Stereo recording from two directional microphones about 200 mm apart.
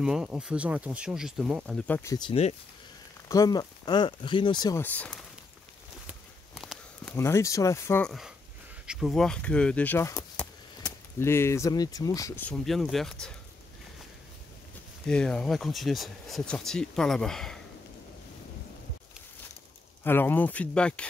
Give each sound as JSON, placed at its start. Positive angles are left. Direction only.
{"t": 0.0, "sound": "speech", "side_deg": -5}
{"t": 2.1, "sound": "speech", "side_deg": 25}
{"t": 4.8, "sound": "speech", "side_deg": 5}
{"t": 6.0, "sound": "a sound", "side_deg": 0}
{"t": 7.2, "sound": "speech", "side_deg": 15}
{"t": 8.8, "sound": "speech", "side_deg": 0}
{"t": 15.0, "sound": "speech", "side_deg": 5}
{"t": 20.0, "sound": "speech", "side_deg": 10}